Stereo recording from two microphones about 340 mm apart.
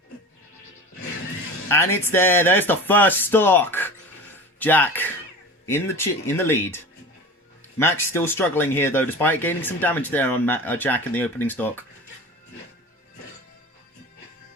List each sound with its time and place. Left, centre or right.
1.6 s speech: centre
8.0 s speech: centre